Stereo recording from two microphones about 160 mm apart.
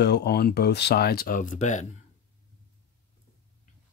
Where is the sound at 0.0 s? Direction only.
90° left; by 1.9 s 50° left (ahead or behind).